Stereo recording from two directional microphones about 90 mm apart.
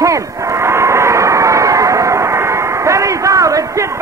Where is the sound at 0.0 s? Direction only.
35° right (ahead or behind).